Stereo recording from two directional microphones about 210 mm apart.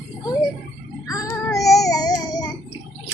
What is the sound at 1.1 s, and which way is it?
Child singing, 15° left (ahead or behind).